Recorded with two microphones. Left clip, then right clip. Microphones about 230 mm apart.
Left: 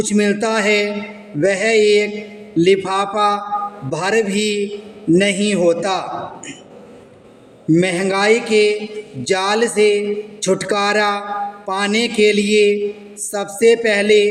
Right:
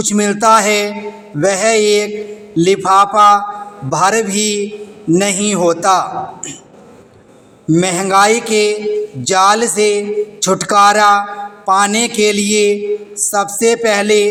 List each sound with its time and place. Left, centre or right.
0.0 s a man's voice: centre
7.7 s a man's voice: centre